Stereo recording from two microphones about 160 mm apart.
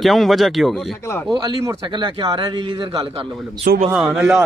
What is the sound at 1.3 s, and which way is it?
A man's voice, 25° right (ahead or behind).